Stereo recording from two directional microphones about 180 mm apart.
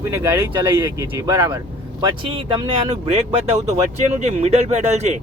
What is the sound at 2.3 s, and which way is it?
Speech, 30° right (ahead or behind).